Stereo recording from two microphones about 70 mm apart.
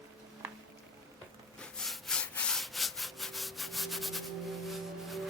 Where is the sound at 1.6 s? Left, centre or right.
Centre.